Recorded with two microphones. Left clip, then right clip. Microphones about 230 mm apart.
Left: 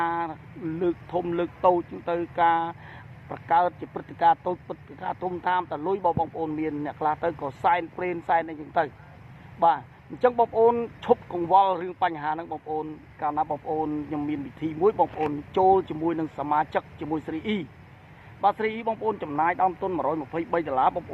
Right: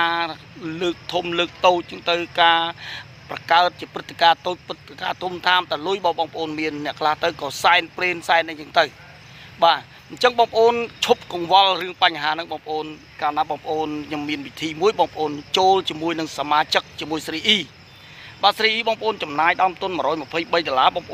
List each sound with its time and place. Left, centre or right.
0.0 s speech: right